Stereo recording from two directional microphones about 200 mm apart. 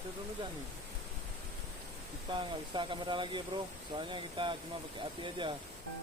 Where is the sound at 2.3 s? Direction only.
25° right (ahead or behind).